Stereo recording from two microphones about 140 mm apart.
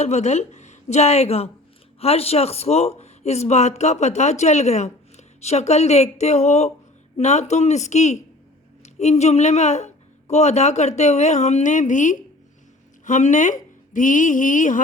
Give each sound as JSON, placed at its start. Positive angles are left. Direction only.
{"t": 0.0, "sound": "a woman's voice", "side_deg": 55}